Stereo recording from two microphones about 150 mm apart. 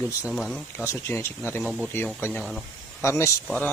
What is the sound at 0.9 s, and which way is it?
Speech, 15° left (ahead or behind).